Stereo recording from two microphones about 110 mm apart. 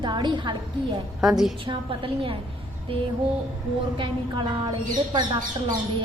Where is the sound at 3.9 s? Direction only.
45° right (ahead or behind).